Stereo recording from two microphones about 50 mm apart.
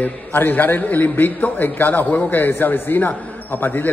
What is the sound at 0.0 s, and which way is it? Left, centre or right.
A man's voice, left.